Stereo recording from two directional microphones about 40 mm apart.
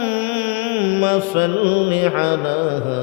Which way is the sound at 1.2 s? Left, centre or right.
Right.